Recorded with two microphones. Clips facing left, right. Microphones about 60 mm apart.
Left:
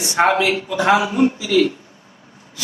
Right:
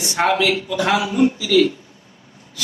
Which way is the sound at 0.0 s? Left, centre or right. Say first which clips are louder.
Left 2 dB; left.